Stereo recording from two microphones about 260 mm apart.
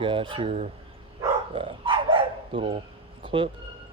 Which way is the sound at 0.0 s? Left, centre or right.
Centre.